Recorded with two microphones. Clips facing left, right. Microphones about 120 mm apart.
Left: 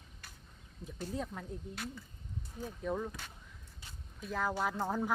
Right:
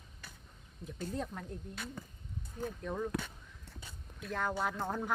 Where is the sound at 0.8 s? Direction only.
Centre (ahead or behind).